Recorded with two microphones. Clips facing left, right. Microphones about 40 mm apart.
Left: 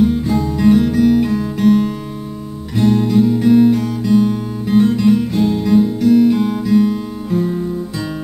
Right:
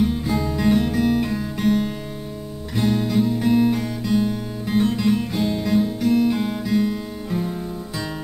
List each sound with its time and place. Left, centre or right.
0.0 s music: centre